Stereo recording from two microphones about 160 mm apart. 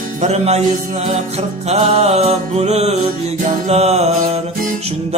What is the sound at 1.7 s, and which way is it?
Music, 40° right (ahead or behind).